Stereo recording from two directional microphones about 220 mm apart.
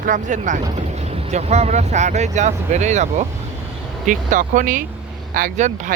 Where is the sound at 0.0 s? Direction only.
35° right (ahead or behind).